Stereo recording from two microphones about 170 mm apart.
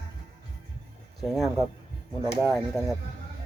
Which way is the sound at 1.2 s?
Centre (ahead or behind).